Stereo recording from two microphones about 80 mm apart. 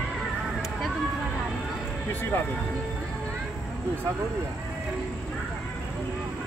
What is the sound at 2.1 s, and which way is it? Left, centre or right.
Speech, left.